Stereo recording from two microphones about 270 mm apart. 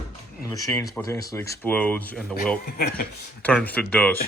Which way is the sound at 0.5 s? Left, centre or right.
Centre.